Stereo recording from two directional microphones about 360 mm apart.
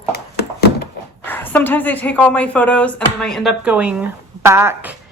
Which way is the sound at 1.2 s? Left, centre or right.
Centre.